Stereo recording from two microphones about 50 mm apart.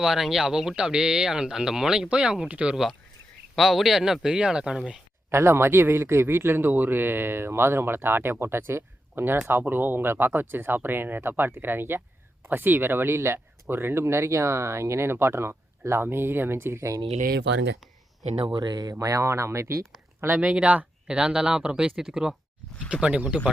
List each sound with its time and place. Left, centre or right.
0.0 s speech: centre
2.0 s speech: right
3.5 s speech: centre
5.3 s a man's voice: right
18.9 s speech: right
20.4 s speech: centre
22.9 s speech: right